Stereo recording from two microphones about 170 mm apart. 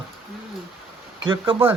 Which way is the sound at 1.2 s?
30° right (ahead or behind).